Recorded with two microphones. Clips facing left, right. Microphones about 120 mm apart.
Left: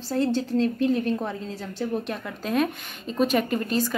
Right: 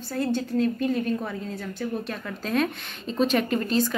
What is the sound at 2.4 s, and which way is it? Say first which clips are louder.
A woman's voice: left 1 dB; 10° left (ahead or behind).